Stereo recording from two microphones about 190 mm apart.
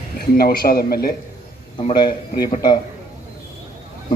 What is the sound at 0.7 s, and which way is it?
Speech, 55° left (ahead or behind).